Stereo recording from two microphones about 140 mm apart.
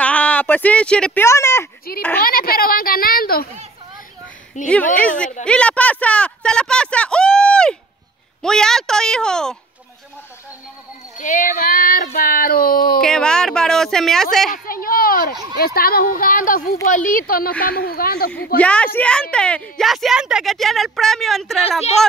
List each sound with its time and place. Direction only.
0.0 s a sound: 10° left (ahead or behind)
1.2 s a child's voice: 20° left (ahead or behind)
2.2 s speech: 90° left
4.6 s speech: 60° left (ahead or behind)
5.4 s speech: 5° left (ahead or behind)
11.1 s speech: 65° left (ahead or behind); by 13.0 s 90° left
13.0 s speech: 5° left (ahead or behind)
14.5 s a child's voice: 90° left
18.6 s a child's voice: 10° left (ahead or behind)